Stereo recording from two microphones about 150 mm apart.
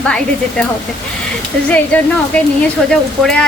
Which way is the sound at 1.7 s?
10° left (ahead or behind).